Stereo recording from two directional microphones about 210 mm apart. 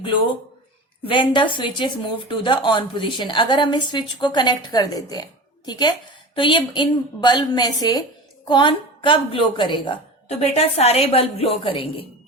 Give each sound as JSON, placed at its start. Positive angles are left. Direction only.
{"t": 0.0, "sound": "speech", "side_deg": 25}